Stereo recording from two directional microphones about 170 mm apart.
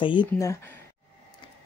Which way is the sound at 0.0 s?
30° left (ahead or behind).